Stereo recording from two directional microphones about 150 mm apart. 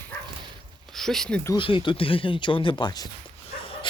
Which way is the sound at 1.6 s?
35° left (ahead or behind).